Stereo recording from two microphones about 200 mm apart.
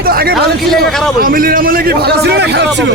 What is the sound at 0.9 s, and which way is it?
Speech, centre (ahead or behind).